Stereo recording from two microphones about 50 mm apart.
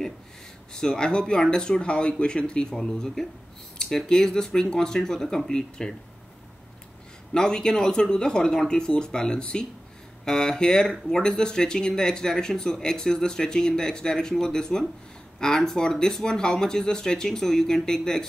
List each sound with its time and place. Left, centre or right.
0.7 s speech: centre
7.3 s speech: centre